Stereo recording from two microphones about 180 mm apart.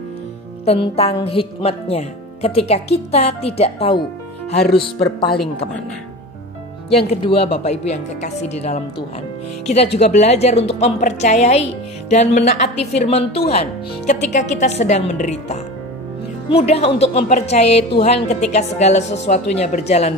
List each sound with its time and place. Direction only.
0.7 s speech: 30° left (ahead or behind)
7.1 s speech: 30° left (ahead or behind)
9.9 s speech: 40° left (ahead or behind)